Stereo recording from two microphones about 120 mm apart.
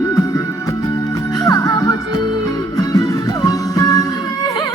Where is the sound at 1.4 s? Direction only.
30° left (ahead or behind).